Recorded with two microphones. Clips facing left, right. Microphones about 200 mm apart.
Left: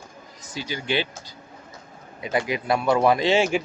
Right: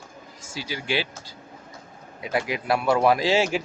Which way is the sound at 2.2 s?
Centre (ahead or behind).